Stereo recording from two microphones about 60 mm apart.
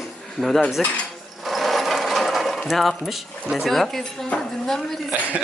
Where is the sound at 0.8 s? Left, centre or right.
Centre.